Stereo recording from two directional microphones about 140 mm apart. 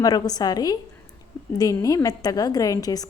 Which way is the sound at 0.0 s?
25° left (ahead or behind).